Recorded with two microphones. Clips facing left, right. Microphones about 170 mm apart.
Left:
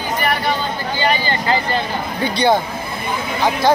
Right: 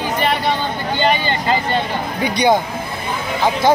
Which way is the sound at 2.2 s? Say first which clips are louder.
Right 1 dB; 15° right (ahead or behind).